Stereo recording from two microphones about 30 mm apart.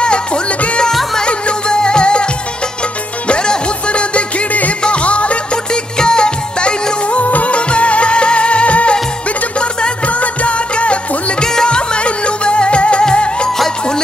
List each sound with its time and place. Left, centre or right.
0.0 s music: left
3.3 s music: left
4.5 s music: left
4.8 s music: left
5.7 s music: left
7.1 s music: left
7.5 s music: left
9.6 s music: left
10.0 s music: left
11.4 s music: left
11.7 s music: left